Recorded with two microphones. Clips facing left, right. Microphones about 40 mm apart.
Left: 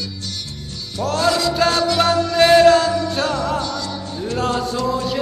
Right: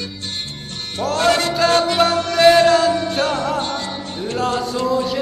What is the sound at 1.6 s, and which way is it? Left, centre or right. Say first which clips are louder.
Music: right 3 dB; right.